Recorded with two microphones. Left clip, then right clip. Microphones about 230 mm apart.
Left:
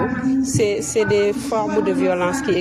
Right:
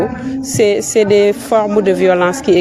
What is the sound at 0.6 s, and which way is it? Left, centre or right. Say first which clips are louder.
A woman's voice: right 9 dB; right.